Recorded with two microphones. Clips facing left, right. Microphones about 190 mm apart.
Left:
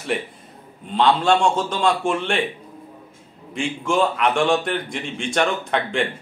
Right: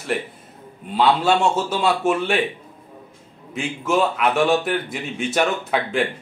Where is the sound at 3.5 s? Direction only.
5° right (ahead or behind).